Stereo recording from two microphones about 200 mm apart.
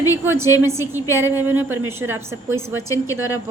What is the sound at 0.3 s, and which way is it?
A woman's voice, 10° right (ahead or behind).